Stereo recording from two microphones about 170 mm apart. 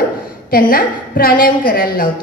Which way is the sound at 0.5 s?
60° left (ahead or behind).